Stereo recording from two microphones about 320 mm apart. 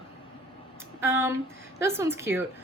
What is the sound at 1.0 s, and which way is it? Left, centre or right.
Speech, centre.